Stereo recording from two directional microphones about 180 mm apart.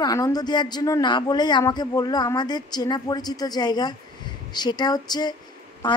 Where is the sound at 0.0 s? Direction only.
20° left (ahead or behind).